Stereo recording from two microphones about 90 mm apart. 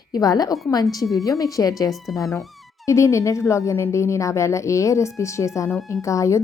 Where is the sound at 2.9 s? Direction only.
35° left (ahead or behind).